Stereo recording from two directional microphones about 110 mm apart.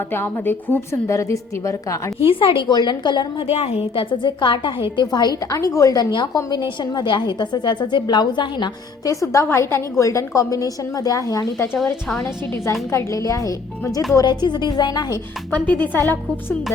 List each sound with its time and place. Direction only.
0.1 s a woman's voice: 20° left (ahead or behind)
2.1 s a woman's voice: 55° left (ahead or behind)
3.4 s a woman's voice: 65° left (ahead or behind)
4.1 s a woman's voice: 45° left (ahead or behind)
9.0 s a woman's voice: 30° left (ahead or behind)
12.9 s a woman's voice: 30° left (ahead or behind)
14.3 s a woman's voice: 40° left (ahead or behind)
15.5 s a woman's voice: 15° left (ahead or behind)